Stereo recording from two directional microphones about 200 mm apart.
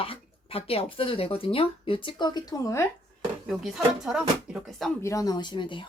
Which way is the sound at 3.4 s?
Centre (ahead or behind).